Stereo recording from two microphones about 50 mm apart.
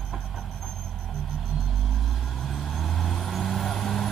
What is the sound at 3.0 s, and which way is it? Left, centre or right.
Vehicle, centre.